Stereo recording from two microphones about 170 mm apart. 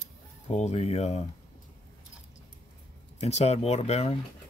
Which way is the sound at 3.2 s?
40° left (ahead or behind).